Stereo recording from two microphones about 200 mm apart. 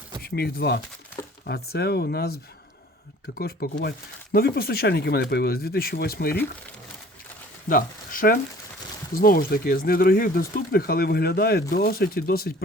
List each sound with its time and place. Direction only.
0.2 s speech: 55° left (ahead or behind)
7.7 s speech: 45° left (ahead or behind)